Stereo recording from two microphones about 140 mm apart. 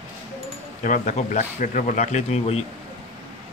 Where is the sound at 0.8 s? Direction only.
70° left (ahead or behind).